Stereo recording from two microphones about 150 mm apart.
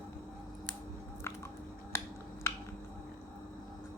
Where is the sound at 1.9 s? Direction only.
15° left (ahead or behind).